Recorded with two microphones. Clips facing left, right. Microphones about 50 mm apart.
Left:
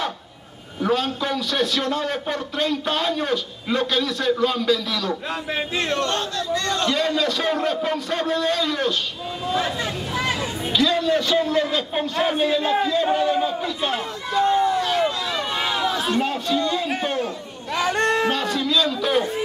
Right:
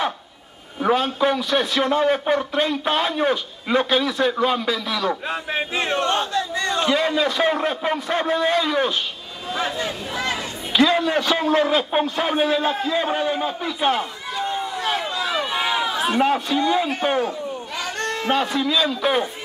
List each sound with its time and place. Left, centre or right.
0.7 s a man's voice: centre
9.5 s a man's voice: centre
10.8 s speech: right
12.2 s speech: centre
15.0 s a sound: centre
17.0 s speech: right
17.7 s a sound: left
18.3 s a man's voice: centre